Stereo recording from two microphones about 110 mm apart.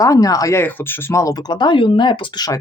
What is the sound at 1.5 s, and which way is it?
Speech, 45° left (ahead or behind).